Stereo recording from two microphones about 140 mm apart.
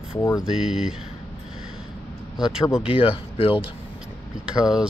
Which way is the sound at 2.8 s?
40° left (ahead or behind).